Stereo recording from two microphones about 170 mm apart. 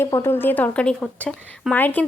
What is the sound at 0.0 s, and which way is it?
A woman's voice, 15° left (ahead or behind).